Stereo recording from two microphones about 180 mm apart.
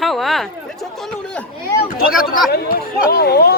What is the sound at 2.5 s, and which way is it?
Speech, 60° left (ahead or behind).